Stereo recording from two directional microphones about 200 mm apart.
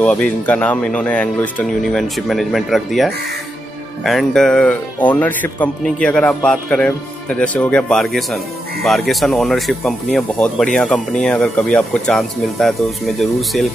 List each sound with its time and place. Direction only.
0.0 s speech: 5° left (ahead or behind)